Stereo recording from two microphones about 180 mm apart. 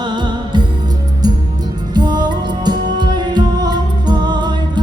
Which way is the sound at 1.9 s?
25° right (ahead or behind).